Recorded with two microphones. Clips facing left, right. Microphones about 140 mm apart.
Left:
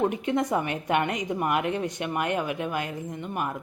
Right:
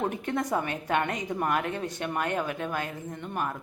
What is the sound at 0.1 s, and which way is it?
A woman's voice, 15° left (ahead or behind).